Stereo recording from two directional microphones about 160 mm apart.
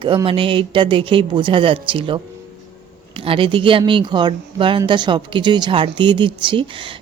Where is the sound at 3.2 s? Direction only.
35° right (ahead or behind).